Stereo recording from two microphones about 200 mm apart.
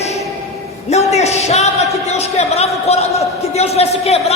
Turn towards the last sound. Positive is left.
turn(degrees=30)  # may be behind; listen again after turning